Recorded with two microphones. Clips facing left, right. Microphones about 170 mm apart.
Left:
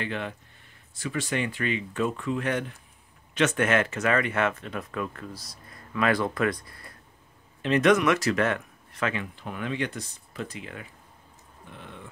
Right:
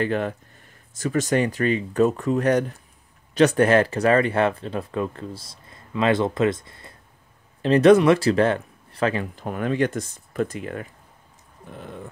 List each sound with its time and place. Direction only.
0.0 s speech: 45° right (ahead or behind)